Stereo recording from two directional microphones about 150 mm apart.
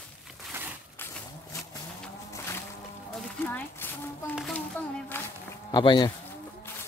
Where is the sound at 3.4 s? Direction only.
10° left (ahead or behind).